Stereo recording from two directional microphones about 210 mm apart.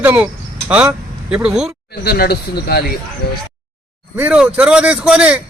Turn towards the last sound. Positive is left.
turn(degrees=-5)  # may be behind; listen again after turning